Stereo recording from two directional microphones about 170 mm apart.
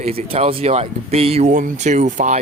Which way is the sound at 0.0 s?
40° right (ahead or behind).